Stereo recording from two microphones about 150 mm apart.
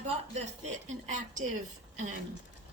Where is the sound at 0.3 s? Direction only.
50° right (ahead or behind).